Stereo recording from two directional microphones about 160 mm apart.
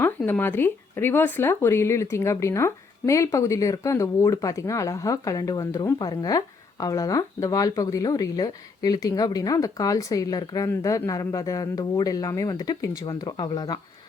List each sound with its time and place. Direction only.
0.3 s speech: 10° left (ahead or behind)